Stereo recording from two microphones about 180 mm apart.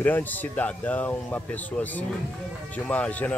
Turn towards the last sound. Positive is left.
turn(degrees=5)  # may be behind; listen again after turning